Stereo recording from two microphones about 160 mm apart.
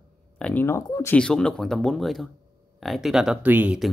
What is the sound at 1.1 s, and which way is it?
Speech, 5° left (ahead or behind).